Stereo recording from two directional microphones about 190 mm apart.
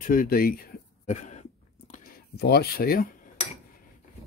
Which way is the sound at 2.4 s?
55° left (ahead or behind).